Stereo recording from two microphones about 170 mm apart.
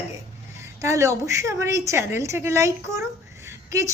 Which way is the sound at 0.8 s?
15° right (ahead or behind).